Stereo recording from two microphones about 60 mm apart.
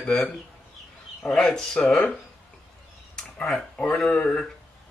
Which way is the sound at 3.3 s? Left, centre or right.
Centre.